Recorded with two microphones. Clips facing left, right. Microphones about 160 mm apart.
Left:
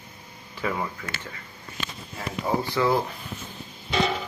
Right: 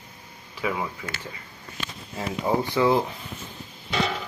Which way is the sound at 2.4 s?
15° right (ahead or behind).